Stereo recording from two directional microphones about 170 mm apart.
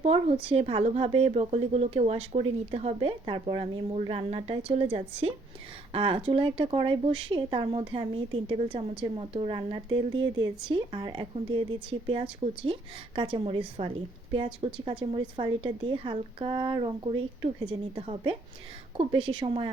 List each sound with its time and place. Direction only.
0.4 s speech: 35° right (ahead or behind)